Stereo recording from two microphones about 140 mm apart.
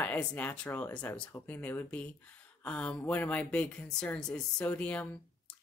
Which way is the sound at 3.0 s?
20° left (ahead or behind).